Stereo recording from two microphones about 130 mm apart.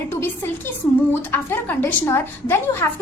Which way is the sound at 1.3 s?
15° left (ahead or behind).